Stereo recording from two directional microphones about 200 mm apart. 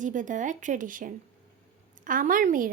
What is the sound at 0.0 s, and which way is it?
Speech, 40° right (ahead or behind).